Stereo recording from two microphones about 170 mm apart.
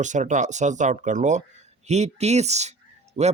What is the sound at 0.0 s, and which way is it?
A man's voice, 45° right (ahead or behind).